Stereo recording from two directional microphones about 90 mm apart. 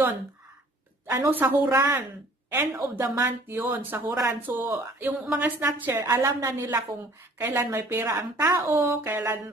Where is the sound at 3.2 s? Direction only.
20° right (ahead or behind).